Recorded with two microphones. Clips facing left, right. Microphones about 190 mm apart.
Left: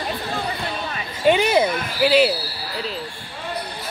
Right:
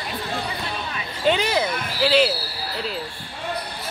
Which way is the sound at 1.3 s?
15° left (ahead or behind).